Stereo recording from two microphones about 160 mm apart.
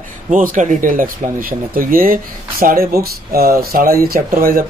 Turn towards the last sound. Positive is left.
turn(degrees=-60)  # may be behind; listen again after turning